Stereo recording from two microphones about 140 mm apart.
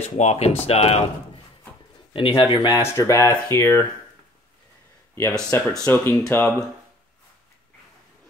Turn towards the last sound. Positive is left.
turn(degrees=10)  # may be behind; listen again after turning